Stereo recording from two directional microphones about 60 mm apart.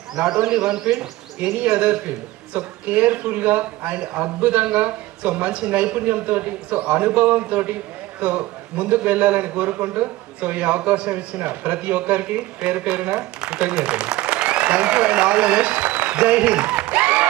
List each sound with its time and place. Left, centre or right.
0.2 s a man's voice: right
13.4 s applause: centre